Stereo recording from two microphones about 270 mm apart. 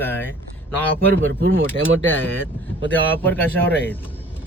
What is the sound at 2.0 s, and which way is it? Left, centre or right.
Speech, centre.